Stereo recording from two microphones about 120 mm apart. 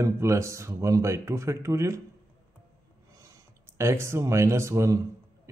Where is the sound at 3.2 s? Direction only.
25° right (ahead or behind).